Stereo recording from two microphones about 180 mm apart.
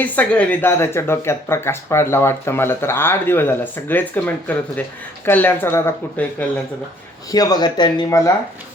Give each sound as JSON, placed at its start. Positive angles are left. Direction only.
{"t": 0.0, "sound": "speech", "side_deg": 10}
{"t": 7.3, "sound": "speech", "side_deg": 20}